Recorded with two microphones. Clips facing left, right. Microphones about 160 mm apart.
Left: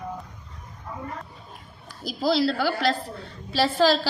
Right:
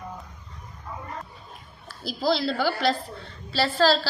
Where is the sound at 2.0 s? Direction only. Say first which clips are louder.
Left 2 dB; 5° left (ahead or behind).